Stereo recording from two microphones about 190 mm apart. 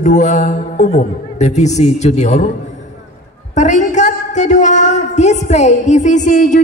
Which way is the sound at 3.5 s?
40° left (ahead or behind).